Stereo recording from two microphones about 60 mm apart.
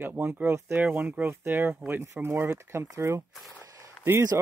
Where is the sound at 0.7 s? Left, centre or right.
Right.